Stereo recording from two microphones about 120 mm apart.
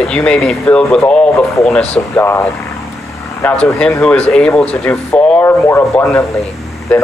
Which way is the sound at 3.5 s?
10° left (ahead or behind).